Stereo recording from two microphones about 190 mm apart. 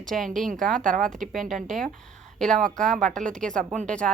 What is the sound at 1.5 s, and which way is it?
Speech, centre (ahead or behind).